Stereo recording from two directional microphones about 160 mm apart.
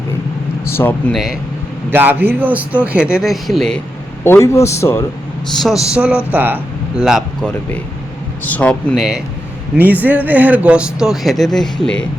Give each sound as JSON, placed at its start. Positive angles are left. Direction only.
{"t": 0.7, "sound": "a man's voice", "side_deg": 15}
{"t": 1.1, "sound": "speech", "side_deg": 0}
{"t": 1.9, "sound": "speech", "side_deg": -10}
{"t": 4.2, "sound": "a man's voice", "side_deg": 15}
{"t": 5.6, "sound": "speech", "side_deg": -5}
{"t": 8.4, "sound": "a man's voice", "side_deg": 10}
{"t": 9.7, "sound": "speech", "side_deg": -10}